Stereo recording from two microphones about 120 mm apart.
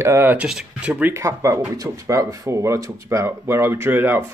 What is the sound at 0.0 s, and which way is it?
Speech, 20° right (ahead or behind).